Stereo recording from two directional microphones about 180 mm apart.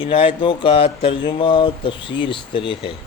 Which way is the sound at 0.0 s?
30° left (ahead or behind).